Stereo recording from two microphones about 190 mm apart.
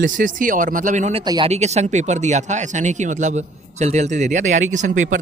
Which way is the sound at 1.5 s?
35° right (ahead or behind).